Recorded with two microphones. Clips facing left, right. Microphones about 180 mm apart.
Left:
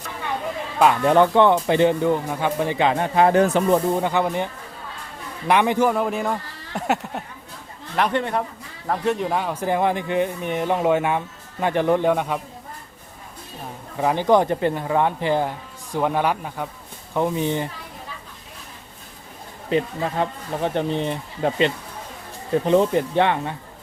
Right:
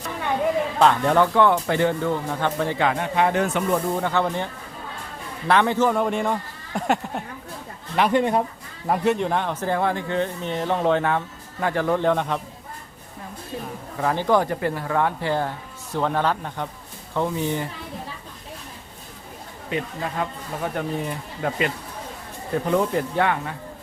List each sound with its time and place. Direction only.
0.8 s speech: 15° left (ahead or behind)
3.0 s speech: 35° left (ahead or behind)
4.0 s speech: 15° left (ahead or behind)
5.5 s speech: 15° left (ahead or behind)
5.9 s speech: 5° left (ahead or behind)
8.1 s speech: 15° right (ahead or behind)
9.0 s speech: centre (ahead or behind)
14.0 s speech: 15° left (ahead or behind)
19.7 s speech: 30° left (ahead or behind)